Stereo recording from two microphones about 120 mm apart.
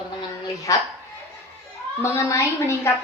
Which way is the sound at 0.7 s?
30° left (ahead or behind).